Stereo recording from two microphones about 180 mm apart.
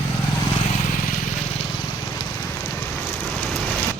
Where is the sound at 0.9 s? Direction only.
50° left (ahead or behind).